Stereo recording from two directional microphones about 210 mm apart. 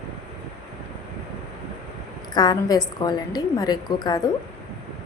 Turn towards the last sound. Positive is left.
turn(degrees=20)  # may be behind; listen again after turning